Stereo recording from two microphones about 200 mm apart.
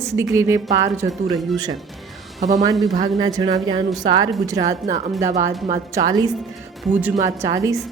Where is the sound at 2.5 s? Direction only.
20° right (ahead or behind).